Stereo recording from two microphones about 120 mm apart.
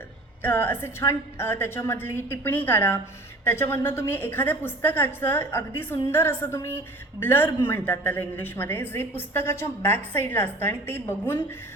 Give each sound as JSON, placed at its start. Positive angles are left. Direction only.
{"t": 0.4, "sound": "a woman's voice", "side_deg": 20}